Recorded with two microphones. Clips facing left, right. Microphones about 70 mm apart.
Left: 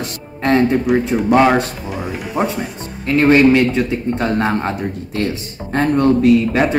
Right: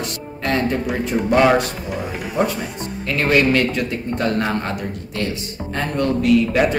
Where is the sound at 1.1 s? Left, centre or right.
Centre.